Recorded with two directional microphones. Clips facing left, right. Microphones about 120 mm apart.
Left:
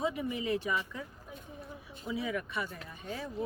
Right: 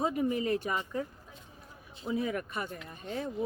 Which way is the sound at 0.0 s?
45° right (ahead or behind).